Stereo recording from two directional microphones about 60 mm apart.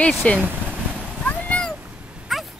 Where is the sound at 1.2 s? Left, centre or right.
Left.